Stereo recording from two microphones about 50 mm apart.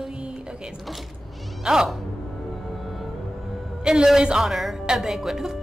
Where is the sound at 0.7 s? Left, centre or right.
Centre.